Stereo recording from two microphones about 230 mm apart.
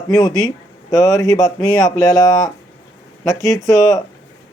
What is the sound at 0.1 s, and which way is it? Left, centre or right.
Speech, centre.